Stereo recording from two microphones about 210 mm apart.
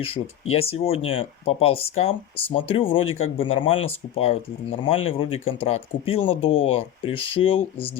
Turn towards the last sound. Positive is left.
turn(degrees=25)  # may be behind; listen again after turning